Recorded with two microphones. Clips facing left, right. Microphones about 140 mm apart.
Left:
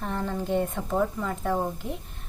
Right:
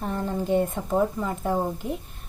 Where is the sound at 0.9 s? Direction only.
20° right (ahead or behind).